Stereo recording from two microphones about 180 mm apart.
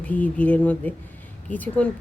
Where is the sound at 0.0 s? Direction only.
10° left (ahead or behind).